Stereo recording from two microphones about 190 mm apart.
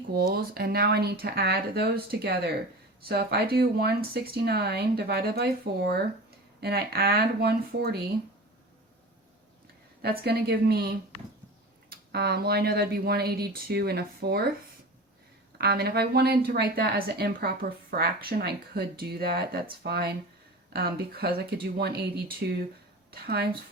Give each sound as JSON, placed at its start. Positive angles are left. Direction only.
{"t": 0.1, "sound": "a woman's voice", "side_deg": -55}
{"t": 10.0, "sound": "a woman's voice", "side_deg": -55}
{"t": 15.5, "sound": "a woman's voice", "side_deg": -55}